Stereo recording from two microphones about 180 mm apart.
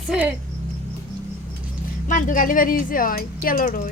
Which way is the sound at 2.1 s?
45° left (ahead or behind).